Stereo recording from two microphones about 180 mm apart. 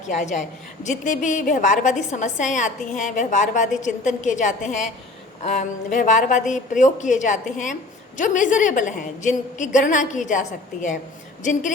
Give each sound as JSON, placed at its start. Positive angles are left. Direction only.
{"t": 0.8, "sound": "a woman's voice", "side_deg": 45}